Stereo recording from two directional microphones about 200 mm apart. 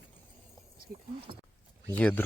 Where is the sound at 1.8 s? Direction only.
10° left (ahead or behind).